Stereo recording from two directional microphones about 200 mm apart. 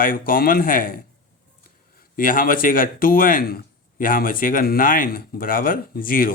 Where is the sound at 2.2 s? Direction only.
45° left (ahead or behind).